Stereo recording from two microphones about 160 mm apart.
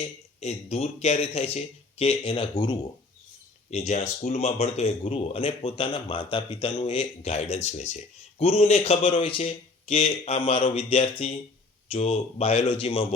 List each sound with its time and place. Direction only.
0.3 s speech: 40° left (ahead or behind)
3.7 s speech: 40° left (ahead or behind)